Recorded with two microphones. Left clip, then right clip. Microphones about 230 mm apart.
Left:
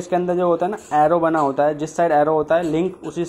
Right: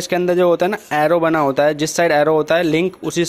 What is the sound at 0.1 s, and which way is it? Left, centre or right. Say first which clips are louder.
Speech: right 3 dB; right.